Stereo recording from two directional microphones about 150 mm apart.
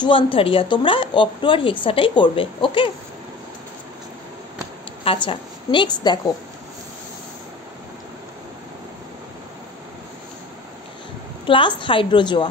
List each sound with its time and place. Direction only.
0.0 s a woman's voice: 35° left (ahead or behind)
5.0 s a woman's voice: 35° left (ahead or behind)
11.4 s a woman's voice: 35° left (ahead or behind)